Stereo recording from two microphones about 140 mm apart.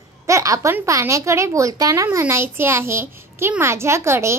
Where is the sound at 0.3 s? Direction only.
25° right (ahead or behind).